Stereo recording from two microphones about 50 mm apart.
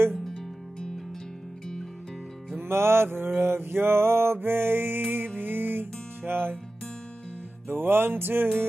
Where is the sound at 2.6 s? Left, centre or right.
Right.